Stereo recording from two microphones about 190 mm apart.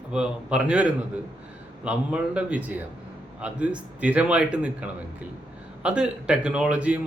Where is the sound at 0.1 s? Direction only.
5° right (ahead or behind).